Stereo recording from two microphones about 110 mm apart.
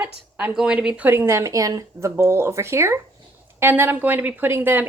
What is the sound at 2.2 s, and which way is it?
Speech, 20° right (ahead or behind).